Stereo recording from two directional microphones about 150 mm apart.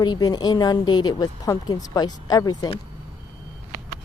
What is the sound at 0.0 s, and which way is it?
Speech, 25° left (ahead or behind).